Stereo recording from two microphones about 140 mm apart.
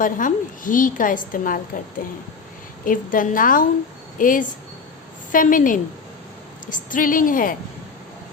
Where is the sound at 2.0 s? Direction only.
90° left.